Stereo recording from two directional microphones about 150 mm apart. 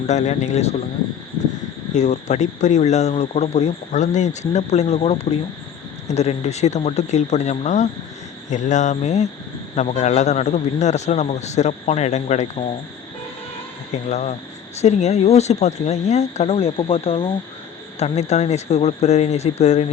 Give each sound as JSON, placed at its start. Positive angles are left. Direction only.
{"t": 0.1, "sound": "speech", "side_deg": 50}
{"t": 1.9, "sound": "speech", "side_deg": 50}
{"t": 14.1, "sound": "speech", "side_deg": 50}